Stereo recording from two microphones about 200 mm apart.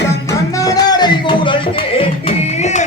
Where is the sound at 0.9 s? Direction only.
20° left (ahead or behind).